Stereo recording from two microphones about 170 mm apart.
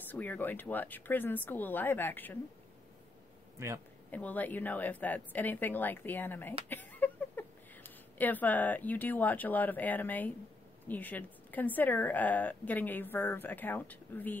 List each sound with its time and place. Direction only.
0.1 s a woman's voice: 10° left (ahead or behind)
3.5 s speech: 15° right (ahead or behind)
4.1 s a woman's voice: 10° left (ahead or behind)